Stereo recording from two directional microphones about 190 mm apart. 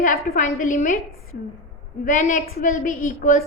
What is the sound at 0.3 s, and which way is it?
Speech, 40° left (ahead or behind).